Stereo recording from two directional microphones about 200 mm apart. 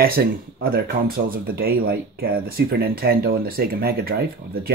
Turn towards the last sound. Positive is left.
turn(degrees=-50)  # may be behind; listen again after turning